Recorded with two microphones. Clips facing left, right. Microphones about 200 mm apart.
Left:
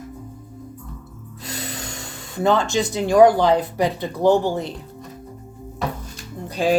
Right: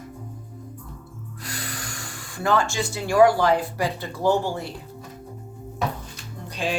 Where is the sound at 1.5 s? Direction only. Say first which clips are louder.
Left 4 dB; 25° left (ahead or behind).